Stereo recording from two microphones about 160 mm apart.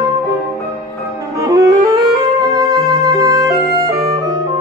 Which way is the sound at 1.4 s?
20° right (ahead or behind).